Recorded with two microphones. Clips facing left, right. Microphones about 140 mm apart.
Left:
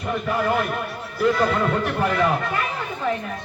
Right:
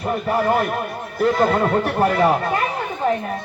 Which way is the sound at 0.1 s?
40° right (ahead or behind).